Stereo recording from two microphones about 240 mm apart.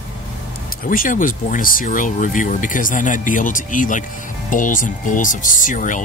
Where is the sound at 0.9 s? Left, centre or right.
Left.